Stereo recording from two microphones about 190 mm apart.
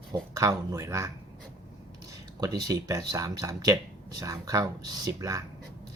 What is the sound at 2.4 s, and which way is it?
Speech, 20° right (ahead or behind).